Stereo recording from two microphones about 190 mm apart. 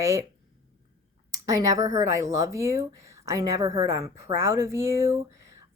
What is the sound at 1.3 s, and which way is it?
Speech, 15° right (ahead or behind).